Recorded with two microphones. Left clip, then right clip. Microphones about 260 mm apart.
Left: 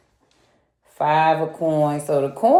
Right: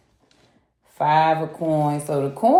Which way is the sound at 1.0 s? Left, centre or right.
Right.